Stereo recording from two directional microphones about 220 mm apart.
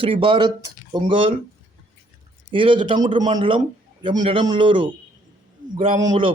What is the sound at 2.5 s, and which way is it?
A man's voice, 20° right (ahead or behind).